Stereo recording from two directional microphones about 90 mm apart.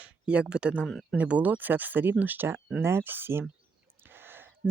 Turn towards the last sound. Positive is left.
turn(degrees=-25)  # may be behind; listen again after turning